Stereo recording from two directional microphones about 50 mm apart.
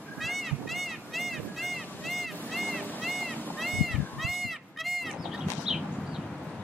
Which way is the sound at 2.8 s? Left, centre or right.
Left.